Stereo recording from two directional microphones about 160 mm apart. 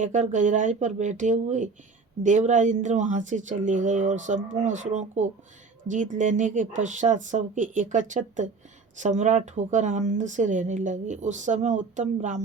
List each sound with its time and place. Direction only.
0.0 s speech: 50° right (ahead or behind)